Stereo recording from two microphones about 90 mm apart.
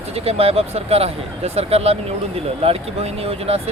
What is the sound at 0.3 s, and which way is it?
Speech, 90° right.